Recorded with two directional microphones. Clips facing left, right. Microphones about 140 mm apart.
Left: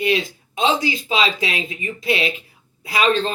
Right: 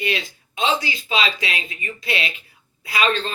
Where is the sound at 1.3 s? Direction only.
35° left (ahead or behind).